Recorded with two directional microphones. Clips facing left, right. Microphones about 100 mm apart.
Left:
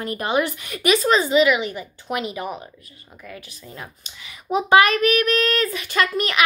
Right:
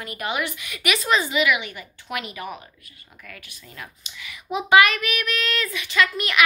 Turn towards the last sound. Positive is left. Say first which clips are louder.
# left 1 dB
turn(degrees=40)  # may be behind; listen again after turning